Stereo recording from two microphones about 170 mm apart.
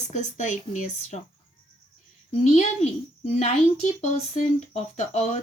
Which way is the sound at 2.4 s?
40° left (ahead or behind).